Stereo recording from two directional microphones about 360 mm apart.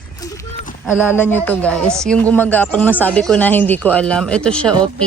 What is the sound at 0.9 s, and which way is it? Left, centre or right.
Speech, centre.